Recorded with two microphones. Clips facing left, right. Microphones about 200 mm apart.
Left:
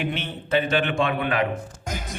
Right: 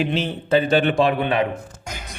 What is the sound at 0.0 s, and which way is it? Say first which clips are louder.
Speech: right 6 dB; 90° right.